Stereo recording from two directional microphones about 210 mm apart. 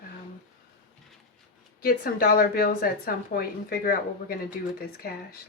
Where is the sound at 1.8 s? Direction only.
45° left (ahead or behind).